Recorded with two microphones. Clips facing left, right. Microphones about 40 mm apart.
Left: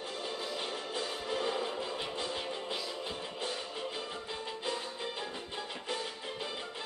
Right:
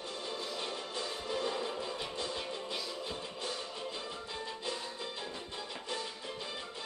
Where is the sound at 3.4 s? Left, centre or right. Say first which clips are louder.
Left 2 dB; left.